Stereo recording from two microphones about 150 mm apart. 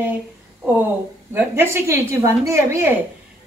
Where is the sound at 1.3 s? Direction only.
15° right (ahead or behind).